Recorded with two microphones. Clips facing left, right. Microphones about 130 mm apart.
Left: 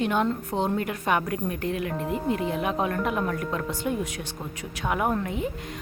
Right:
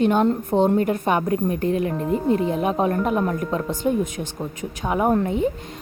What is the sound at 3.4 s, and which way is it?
Speech, 25° right (ahead or behind).